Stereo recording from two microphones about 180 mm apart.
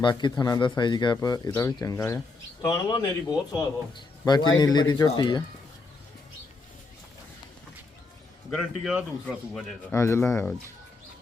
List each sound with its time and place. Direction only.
0.0 s speech: 25° left (ahead or behind)
8.4 s a man's voice: centre (ahead or behind)
9.2 s speech: 10° left (ahead or behind)